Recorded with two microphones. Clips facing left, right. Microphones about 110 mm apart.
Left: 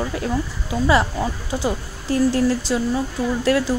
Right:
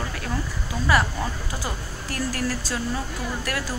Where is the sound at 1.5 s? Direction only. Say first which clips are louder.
Left 8 dB; 20° left (ahead or behind).